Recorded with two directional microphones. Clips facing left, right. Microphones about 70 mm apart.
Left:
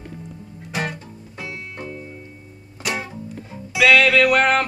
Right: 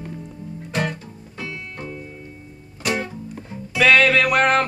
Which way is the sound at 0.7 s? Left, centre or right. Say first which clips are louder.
Right 1 dB; centre.